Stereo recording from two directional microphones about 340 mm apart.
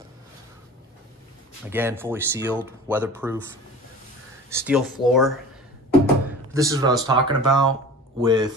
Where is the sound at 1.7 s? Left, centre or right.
Centre.